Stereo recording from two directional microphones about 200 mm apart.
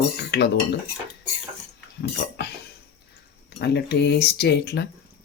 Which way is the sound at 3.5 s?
55° left (ahead or behind).